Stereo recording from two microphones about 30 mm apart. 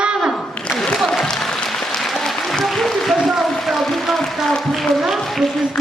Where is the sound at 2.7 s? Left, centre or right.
Centre.